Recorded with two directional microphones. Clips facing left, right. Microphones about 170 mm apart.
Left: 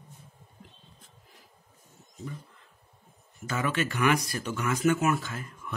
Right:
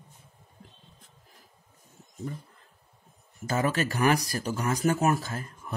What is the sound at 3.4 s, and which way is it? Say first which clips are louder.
Speech: right 3 dB; 40° right (ahead or behind).